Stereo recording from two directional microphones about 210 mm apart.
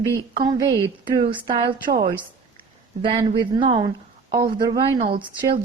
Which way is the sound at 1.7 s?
45° right (ahead or behind).